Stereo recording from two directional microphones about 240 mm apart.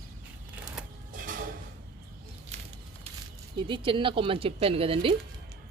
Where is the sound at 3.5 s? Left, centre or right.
Centre.